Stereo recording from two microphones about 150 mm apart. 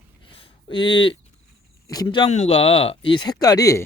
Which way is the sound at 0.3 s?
35° left (ahead or behind).